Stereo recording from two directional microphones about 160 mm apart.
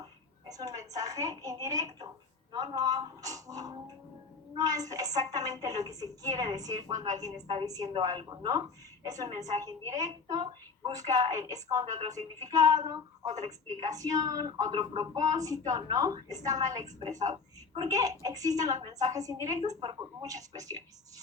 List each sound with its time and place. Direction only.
0.0 s a woman's voice: 25° right (ahead or behind)